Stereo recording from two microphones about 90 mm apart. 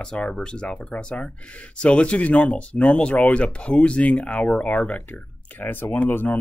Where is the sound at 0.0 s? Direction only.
10° left (ahead or behind).